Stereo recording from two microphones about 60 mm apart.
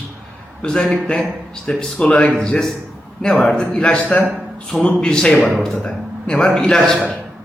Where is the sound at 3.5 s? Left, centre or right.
Centre.